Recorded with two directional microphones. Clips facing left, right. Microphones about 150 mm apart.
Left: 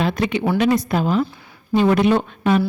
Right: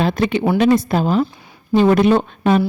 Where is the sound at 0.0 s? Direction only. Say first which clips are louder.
Right 3 dB; 30° right (ahead or behind).